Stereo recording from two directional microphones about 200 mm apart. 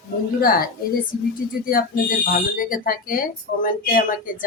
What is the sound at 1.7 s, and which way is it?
Speech, 45° left (ahead or behind).